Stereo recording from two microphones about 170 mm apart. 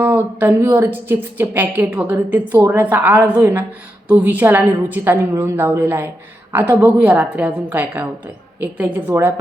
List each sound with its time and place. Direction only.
0.0 s a woman's voice: 10° right (ahead or behind)